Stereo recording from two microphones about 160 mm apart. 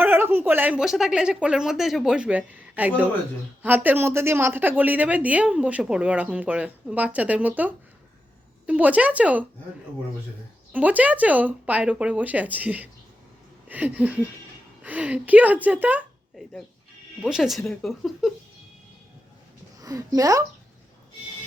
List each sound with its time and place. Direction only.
0.0 s a woman's voice: 15° right (ahead or behind)
10.7 s a woman's voice: 10° right (ahead or behind)
19.8 s speech: 20° right (ahead or behind)